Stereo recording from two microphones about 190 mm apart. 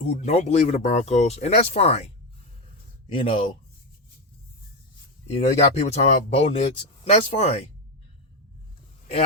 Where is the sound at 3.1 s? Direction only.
25° left (ahead or behind).